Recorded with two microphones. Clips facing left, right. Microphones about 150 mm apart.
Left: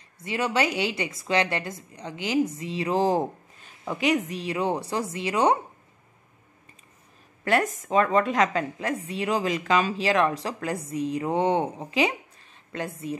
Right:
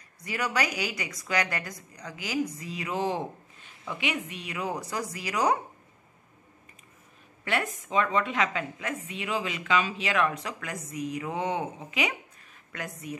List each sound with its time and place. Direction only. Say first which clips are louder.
0.2 s a woman's voice: left 4 dB; 25° left (ahead or behind)
7.4 s a woman's voice: left 6 dB; 40° left (ahead or behind)